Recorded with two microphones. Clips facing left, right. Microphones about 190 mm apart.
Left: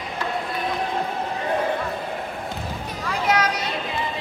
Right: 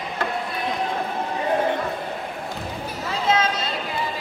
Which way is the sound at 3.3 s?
25° right (ahead or behind).